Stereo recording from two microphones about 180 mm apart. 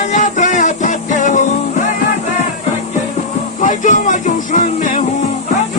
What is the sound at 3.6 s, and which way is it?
Music, 45° left (ahead or behind).